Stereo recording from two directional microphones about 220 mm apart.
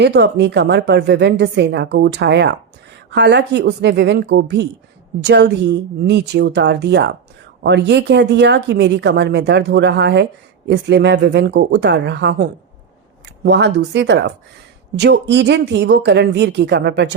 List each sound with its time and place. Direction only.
0.0 s a woman's voice: 50° right (ahead or behind)